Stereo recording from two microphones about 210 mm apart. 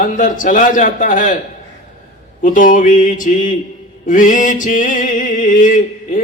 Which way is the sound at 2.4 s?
40° left (ahead or behind).